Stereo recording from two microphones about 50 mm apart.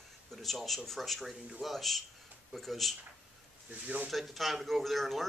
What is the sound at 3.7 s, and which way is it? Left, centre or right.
Speech, right.